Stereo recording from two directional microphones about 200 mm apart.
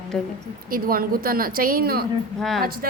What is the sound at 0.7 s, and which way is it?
A woman's voice, 45° right (ahead or behind).